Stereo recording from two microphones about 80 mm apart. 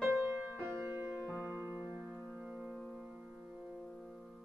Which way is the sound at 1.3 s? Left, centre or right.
Centre.